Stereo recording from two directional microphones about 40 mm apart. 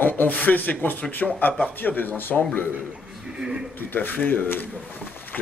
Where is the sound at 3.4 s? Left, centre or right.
Centre.